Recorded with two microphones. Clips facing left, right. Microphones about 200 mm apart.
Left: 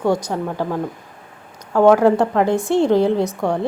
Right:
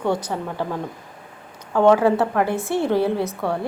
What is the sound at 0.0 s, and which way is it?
A woman's voice, 10° left (ahead or behind).